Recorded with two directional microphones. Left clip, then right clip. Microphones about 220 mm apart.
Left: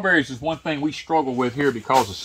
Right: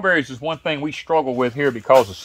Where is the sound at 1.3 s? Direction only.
20° right (ahead or behind).